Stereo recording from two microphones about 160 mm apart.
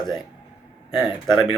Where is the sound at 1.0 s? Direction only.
15° right (ahead or behind).